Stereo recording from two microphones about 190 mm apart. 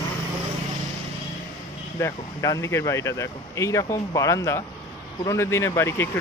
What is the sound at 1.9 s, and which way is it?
Speech, 15° left (ahead or behind).